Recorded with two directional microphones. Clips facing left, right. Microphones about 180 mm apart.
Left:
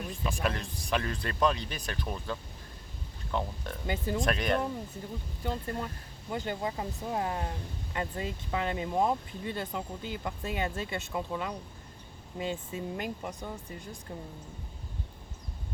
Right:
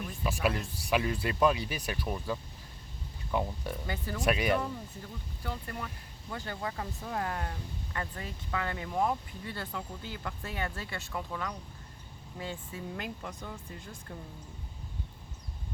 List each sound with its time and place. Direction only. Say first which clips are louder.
0.3 s speech: right 2 dB; 5° right (ahead or behind)
3.8 s speech: left 9 dB; 20° left (ahead or behind)
4.2 s speech: right 2 dB; 5° right (ahead or behind)
5.4 s speech: left 5 dB; 25° left (ahead or behind)